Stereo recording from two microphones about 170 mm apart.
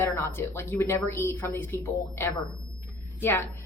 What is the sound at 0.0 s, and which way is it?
Speech, 15° left (ahead or behind).